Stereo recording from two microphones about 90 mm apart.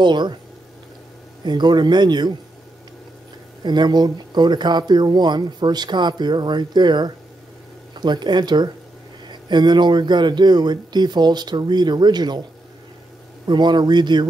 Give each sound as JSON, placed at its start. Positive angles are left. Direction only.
{"t": 0.0, "sound": "speech", "side_deg": -55}
{"t": 1.4, "sound": "speech", "side_deg": -55}
{"t": 3.6, "sound": "speech", "side_deg": -55}
{"t": 13.5, "sound": "speech", "side_deg": -55}